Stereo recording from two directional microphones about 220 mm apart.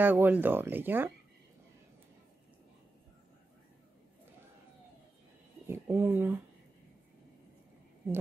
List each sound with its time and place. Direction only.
0.0 s speech: 10° right (ahead or behind)
5.7 s speech: 10° right (ahead or behind)